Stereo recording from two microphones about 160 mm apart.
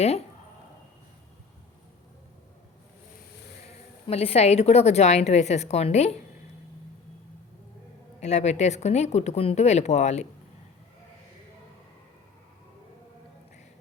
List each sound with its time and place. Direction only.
4.0 s a woman's voice: 40° left (ahead or behind)
8.2 s a woman's voice: 45° left (ahead or behind)